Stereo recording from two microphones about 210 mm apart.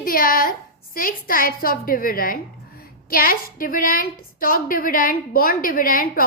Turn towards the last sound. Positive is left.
turn(degrees=45)  # may be behind; listen again after turning